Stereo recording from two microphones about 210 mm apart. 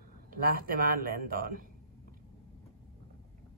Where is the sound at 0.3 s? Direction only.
45° right (ahead or behind).